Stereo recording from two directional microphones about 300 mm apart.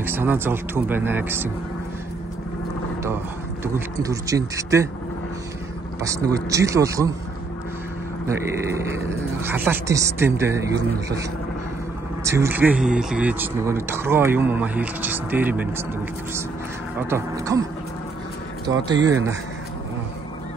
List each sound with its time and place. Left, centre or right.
0.0 s speech: centre
3.6 s speech: centre
6.0 s speech: centre
8.3 s speech: centre
12.3 s speech: centre
17.1 s speech: centre
18.7 s speech: centre